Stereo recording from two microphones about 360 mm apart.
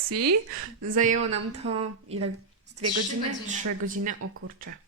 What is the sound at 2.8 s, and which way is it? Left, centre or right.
A woman's voice, right.